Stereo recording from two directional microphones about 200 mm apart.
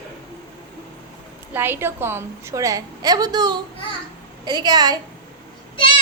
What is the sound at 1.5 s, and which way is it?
A woman's voice, 10° right (ahead or behind).